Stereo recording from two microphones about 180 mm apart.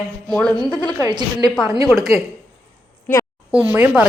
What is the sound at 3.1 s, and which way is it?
Speech, 10° left (ahead or behind).